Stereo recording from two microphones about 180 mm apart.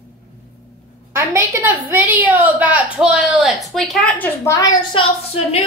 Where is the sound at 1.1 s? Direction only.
15° right (ahead or behind).